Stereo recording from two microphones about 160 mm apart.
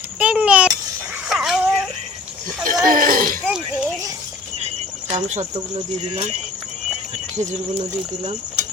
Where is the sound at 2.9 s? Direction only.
60° right (ahead or behind).